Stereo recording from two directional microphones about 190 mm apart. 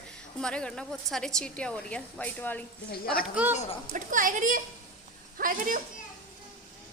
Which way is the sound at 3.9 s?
45° right (ahead or behind).